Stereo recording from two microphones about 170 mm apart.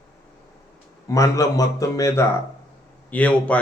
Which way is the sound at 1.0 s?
20° left (ahead or behind).